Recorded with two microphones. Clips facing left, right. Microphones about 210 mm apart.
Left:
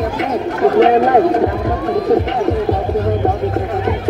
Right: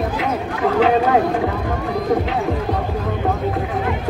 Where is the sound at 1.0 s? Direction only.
45° left (ahead or behind).